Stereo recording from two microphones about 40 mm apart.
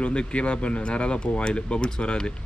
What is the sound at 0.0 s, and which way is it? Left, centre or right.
Speech, left.